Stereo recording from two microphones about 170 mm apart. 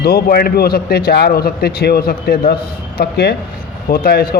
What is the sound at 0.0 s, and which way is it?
A man's voice, 65° left (ahead or behind).